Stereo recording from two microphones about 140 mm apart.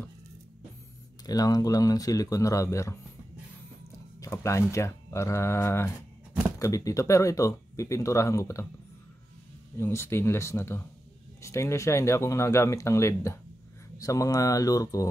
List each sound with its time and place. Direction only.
1.2 s speech: 25° left (ahead or behind)
9.8 s speech: 15° left (ahead or behind)